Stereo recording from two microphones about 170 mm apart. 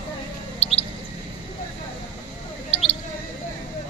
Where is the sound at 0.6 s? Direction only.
35° left (ahead or behind).